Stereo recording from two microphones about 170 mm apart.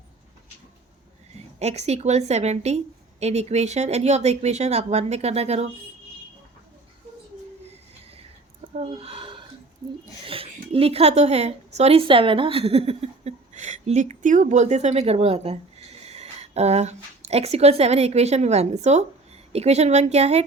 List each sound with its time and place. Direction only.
1.5 s a woman's voice: 40° right (ahead or behind)
8.7 s a sound: 40° right (ahead or behind)
10.2 s a woman's voice: 35° right (ahead or behind)